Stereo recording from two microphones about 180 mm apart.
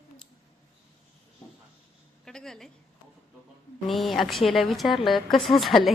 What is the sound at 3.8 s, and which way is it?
A woman's voice, centre (ahead or behind).